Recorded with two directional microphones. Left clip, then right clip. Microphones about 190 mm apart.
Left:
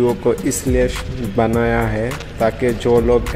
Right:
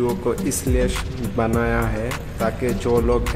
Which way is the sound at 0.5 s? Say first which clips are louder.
Left 5 dB; 15° left (ahead or behind).